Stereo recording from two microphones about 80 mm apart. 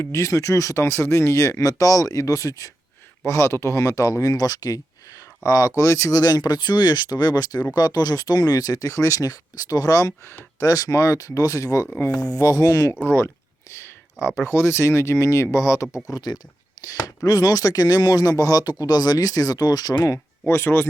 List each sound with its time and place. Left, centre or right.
0.0 s speech: left
6.1 s speech: left
13.1 s a sound: left
14.3 s speech: left
16.0 s speech: left
16.8 s a sound: left
17.2 s speech: left
20.5 s speech: left